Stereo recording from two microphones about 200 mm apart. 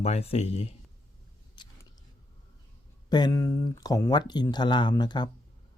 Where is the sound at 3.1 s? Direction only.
20° left (ahead or behind).